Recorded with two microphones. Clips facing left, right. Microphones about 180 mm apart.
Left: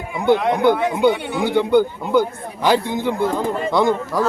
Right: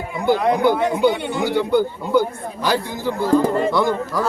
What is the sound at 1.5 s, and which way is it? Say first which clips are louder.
Speech: left 3 dB; 20° left (ahead or behind).